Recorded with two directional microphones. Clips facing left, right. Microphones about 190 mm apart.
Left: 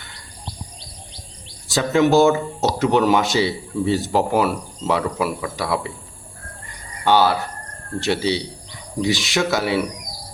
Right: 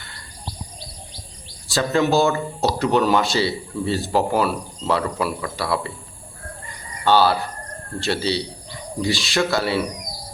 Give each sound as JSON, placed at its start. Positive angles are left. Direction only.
{"t": 1.6, "sound": "speech", "side_deg": 20}
{"t": 7.0, "sound": "cricket", "side_deg": 15}
{"t": 7.9, "sound": "speech", "side_deg": 15}